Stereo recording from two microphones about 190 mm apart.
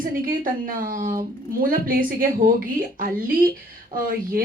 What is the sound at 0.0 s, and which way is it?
A woman's voice, 45° right (ahead or behind).